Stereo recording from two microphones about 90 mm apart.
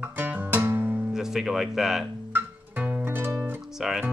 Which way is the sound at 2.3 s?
20° right (ahead or behind).